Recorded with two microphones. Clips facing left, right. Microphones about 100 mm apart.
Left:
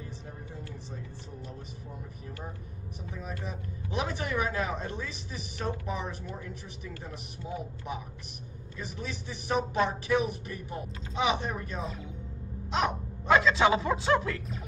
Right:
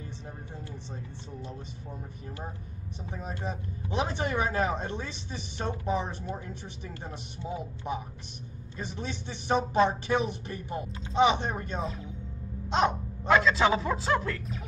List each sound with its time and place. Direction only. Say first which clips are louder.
3.1 s speech: right 3 dB; 35° right (ahead or behind)
12.6 s a sound: right 3 dB; 30° right (ahead or behind)
13.3 s a man's voice: even; centre (ahead or behind)